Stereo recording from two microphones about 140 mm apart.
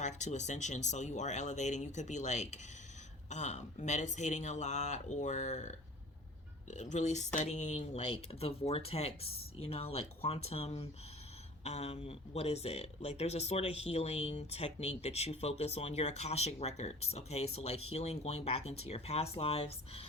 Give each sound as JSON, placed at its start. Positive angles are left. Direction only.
{"t": 0.0, "sound": "speech", "side_deg": 55}